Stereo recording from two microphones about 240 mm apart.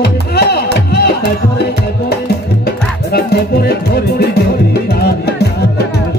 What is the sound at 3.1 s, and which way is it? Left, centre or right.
Music, left.